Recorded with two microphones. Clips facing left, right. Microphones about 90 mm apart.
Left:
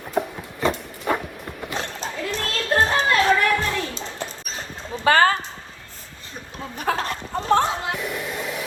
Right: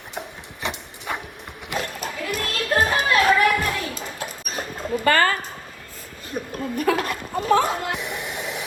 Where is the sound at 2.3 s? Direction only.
30° left (ahead or behind).